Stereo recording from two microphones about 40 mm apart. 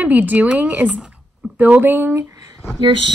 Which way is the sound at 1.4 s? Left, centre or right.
Right.